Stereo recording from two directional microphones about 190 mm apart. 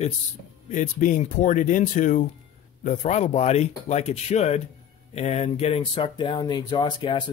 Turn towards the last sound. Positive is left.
turn(degrees=25)  # may be behind; listen again after turning